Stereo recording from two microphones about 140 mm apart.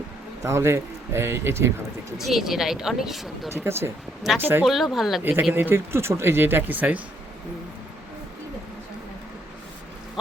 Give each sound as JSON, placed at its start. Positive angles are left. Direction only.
{"t": 0.4, "sound": "a man's voice", "side_deg": -20}
{"t": 2.1, "sound": "speech", "side_deg": 0}
{"t": 3.5, "sound": "speech", "side_deg": -15}
{"t": 4.6, "sound": "speech", "side_deg": 0}
{"t": 5.4, "sound": "speech", "side_deg": -15}